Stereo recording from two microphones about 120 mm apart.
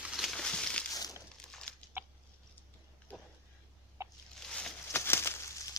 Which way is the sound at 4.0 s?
25° right (ahead or behind).